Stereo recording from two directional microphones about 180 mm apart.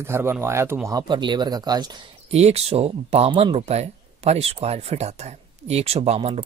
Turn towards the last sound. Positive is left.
turn(degrees=-35)  # may be behind; listen again after turning